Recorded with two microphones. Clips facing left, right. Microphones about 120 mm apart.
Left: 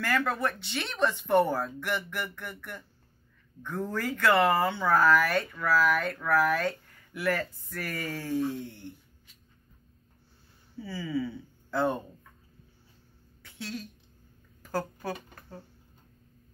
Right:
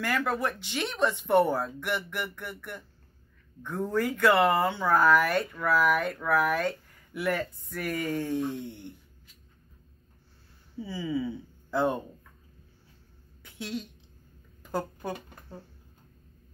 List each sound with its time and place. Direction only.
0.0 s speech: 10° right (ahead or behind)
10.8 s speech: 15° right (ahead or behind)
13.4 s a sound: 20° right (ahead or behind)
14.8 s speech: centre (ahead or behind)